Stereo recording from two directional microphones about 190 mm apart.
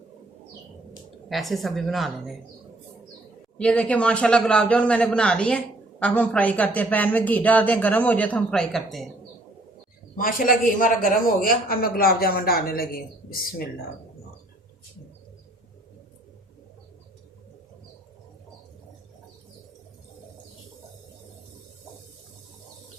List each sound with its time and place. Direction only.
1.3 s a woman's voice: centre (ahead or behind)
3.6 s a man's voice: 5° left (ahead or behind)
10.2 s a man's voice: 45° left (ahead or behind)